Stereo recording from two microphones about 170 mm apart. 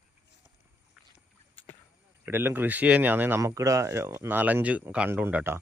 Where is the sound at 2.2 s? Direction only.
10° right (ahead or behind).